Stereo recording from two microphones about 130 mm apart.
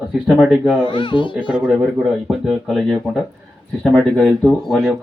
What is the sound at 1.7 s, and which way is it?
Speech, 5° right (ahead or behind).